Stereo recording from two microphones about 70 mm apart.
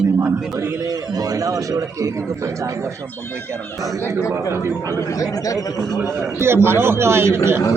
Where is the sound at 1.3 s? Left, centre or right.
Right.